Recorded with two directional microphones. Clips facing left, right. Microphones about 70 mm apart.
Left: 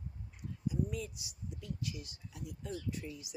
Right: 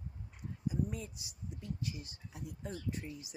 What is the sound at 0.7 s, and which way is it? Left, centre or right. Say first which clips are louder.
Speech: left 1 dB; right.